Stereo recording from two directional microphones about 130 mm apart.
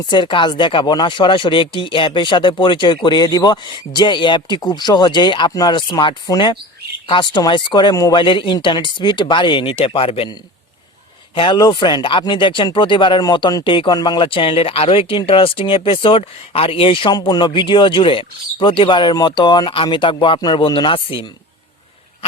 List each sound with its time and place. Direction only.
0.0 s speech: 35° left (ahead or behind)
11.3 s speech: 35° left (ahead or behind)